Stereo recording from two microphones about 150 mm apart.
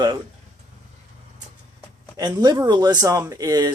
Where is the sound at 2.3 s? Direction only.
25° right (ahead or behind).